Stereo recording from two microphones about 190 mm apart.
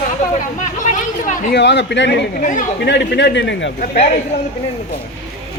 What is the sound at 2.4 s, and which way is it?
Speech, 40° left (ahead or behind).